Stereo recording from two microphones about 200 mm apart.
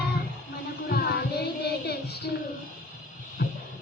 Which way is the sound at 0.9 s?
55° left (ahead or behind).